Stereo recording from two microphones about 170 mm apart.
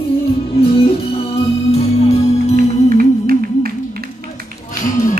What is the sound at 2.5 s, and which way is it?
Music, 55° right (ahead or behind).